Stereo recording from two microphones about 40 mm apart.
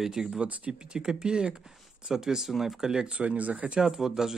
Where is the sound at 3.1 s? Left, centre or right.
Right.